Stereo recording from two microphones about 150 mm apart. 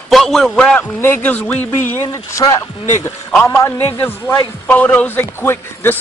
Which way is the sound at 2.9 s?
15° left (ahead or behind).